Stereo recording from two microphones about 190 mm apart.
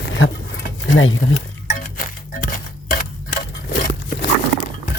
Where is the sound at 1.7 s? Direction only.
45° left (ahead or behind).